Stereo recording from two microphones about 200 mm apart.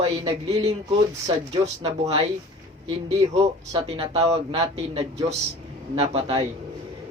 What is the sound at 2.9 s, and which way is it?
Speech, 25° right (ahead or behind).